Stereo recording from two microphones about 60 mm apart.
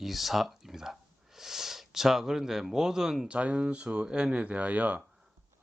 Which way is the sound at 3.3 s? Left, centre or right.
Right.